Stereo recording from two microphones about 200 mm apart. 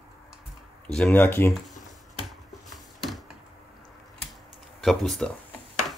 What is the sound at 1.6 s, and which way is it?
Computer keyboard, centre (ahead or behind).